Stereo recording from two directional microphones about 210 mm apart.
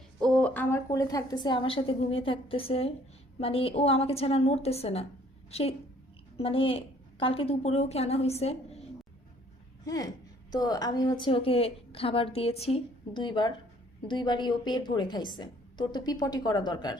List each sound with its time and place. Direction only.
0.2 s a woman's voice: 5° left (ahead or behind); by 8.9 s 30° left (ahead or behind)
9.8 s a woman's voice: 15° left (ahead or behind)